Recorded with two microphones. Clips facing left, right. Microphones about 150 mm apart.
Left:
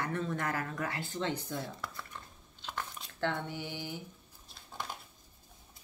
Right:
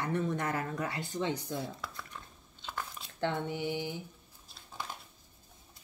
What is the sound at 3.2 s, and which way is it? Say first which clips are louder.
Speech: right 2 dB; 15° right (ahead or behind).